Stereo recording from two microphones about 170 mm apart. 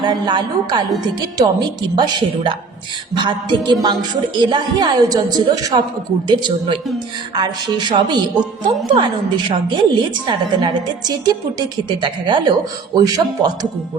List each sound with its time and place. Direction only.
0.0 s a woman's voice: 25° right (ahead or behind)